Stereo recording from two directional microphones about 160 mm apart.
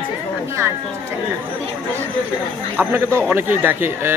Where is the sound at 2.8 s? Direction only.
15° right (ahead or behind).